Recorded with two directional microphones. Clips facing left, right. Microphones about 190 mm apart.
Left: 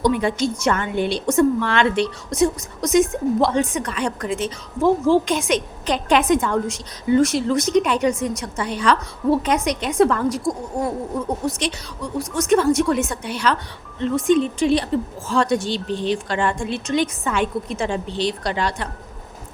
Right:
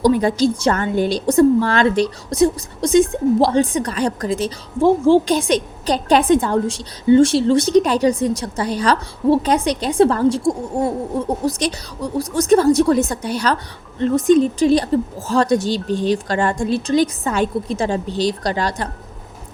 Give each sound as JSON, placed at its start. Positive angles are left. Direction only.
{"t": 0.0, "sound": "a woman's voice", "side_deg": -40}